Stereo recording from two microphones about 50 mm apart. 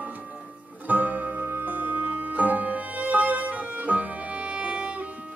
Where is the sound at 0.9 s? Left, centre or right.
Right.